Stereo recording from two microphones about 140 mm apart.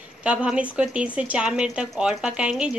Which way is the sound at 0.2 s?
5° right (ahead or behind).